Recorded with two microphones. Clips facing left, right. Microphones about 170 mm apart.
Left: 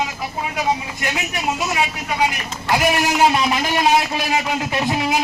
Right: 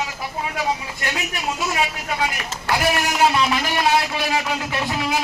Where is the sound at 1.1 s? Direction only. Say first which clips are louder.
Left 4 dB; 20° left (ahead or behind).